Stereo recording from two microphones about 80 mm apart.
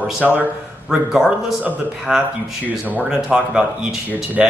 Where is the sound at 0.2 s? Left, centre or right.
Right.